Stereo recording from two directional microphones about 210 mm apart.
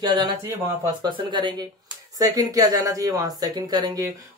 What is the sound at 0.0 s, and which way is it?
Speech, 20° right (ahead or behind).